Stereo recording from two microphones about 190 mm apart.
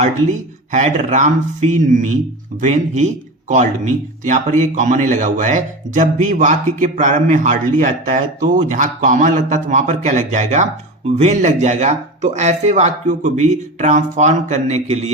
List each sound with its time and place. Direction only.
0.0 s a man's voice: 40° right (ahead or behind)